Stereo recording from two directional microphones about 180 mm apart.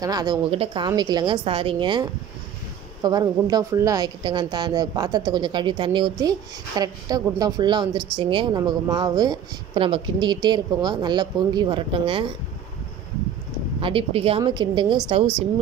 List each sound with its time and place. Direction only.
0.0 s speech: 20° right (ahead or behind)
13.7 s speech: 30° right (ahead or behind)